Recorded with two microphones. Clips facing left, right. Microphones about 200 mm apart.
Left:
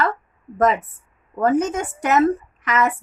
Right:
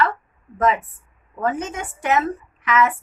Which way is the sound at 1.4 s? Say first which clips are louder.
Left 6 dB; 45° left (ahead or behind).